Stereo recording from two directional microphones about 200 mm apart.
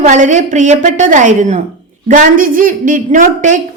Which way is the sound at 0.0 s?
40° right (ahead or behind).